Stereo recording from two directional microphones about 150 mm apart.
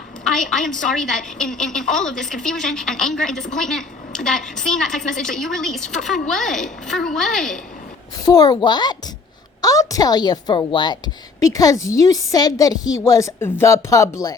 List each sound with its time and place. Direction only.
0.3 s a woman's voice: 5° left (ahead or behind)
1.8 s speech: 55° left (ahead or behind)
2.0 s a woman's voice: 5° left (ahead or behind)
8.2 s a woman's voice: 25° left (ahead or behind)